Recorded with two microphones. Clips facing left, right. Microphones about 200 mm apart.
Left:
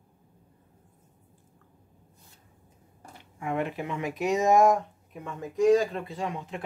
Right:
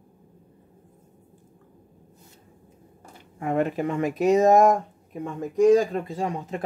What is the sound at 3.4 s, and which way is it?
Speech, 40° right (ahead or behind).